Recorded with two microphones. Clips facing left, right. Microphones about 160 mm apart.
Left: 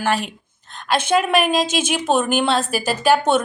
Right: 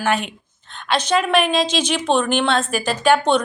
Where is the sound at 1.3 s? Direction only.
45° left (ahead or behind).